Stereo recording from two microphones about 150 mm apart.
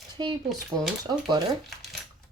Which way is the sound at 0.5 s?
5° right (ahead or behind).